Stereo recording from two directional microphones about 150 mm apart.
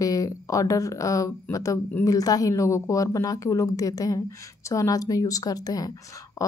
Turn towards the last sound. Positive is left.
turn(degrees=25)  # may be behind; listen again after turning